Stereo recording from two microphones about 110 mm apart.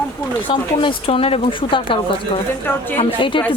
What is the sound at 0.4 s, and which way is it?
Speech, 50° left (ahead or behind).